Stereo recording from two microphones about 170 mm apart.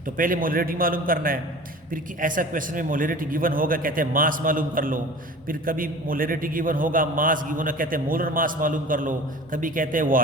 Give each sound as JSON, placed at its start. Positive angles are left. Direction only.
{"t": 0.2, "sound": "a man's voice", "side_deg": -55}